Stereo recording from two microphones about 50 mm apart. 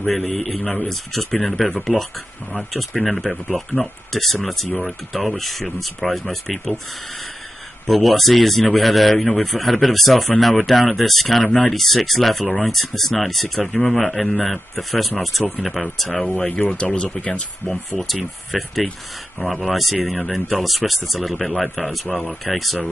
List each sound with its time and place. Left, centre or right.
0.0 s speech: centre
7.8 s speech: centre
16.4 s speech: left
17.6 s speech: centre